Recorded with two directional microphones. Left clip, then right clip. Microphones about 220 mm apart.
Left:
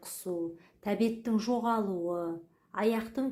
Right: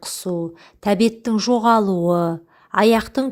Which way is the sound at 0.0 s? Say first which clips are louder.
Right 12 dB; 35° right (ahead or behind).